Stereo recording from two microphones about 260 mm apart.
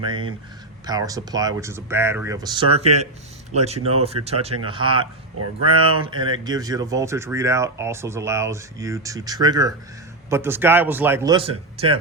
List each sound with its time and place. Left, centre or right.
0.0 s speech: centre